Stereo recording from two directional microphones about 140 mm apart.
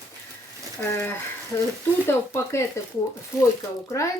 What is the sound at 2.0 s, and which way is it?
Speech, 20° left (ahead or behind).